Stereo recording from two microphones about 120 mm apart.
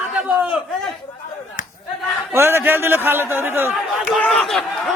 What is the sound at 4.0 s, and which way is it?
Speech, centre (ahead or behind).